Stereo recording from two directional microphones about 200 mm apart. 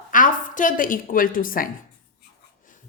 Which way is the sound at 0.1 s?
40° left (ahead or behind).